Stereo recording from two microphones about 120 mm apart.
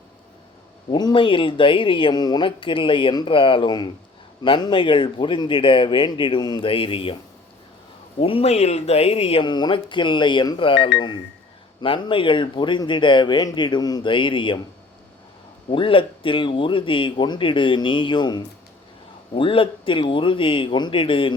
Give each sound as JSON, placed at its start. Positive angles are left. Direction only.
{"t": 0.9, "sound": "speech", "side_deg": 40}
{"t": 8.2, "sound": "speech", "side_deg": 50}
{"t": 9.4, "sound": "speech", "side_deg": 40}
{"t": 15.7, "sound": "speech", "side_deg": 45}
{"t": 19.3, "sound": "speech", "side_deg": 50}